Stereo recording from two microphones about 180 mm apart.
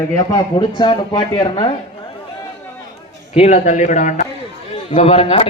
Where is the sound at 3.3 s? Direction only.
40° left (ahead or behind).